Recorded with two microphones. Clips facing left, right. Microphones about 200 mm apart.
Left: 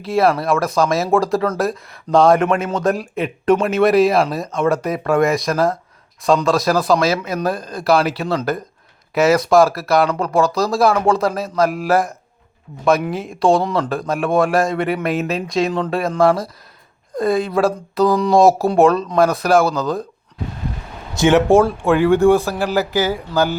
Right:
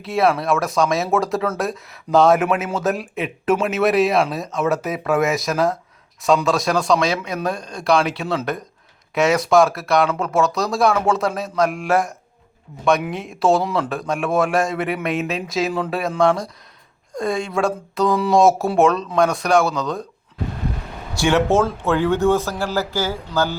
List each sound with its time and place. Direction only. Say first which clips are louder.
0.0 s speech: left 2 dB; centre (ahead or behind)
21.2 s speech: left 5 dB; 15° left (ahead or behind)